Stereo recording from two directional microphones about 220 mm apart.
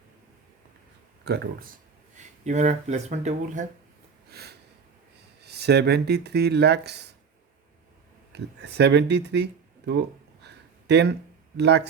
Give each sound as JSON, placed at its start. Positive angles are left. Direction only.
{"t": 1.2, "sound": "speech", "side_deg": -45}
{"t": 2.1, "sound": "speech", "side_deg": -30}
{"t": 4.3, "sound": "a sound", "side_deg": -45}
{"t": 5.4, "sound": "speech", "side_deg": -50}
{"t": 8.3, "sound": "speech", "side_deg": -50}
{"t": 10.4, "sound": "a sound", "side_deg": -50}
{"t": 11.5, "sound": "speech", "side_deg": -50}